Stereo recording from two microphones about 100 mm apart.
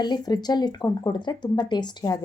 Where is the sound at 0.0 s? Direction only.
45° left (ahead or behind).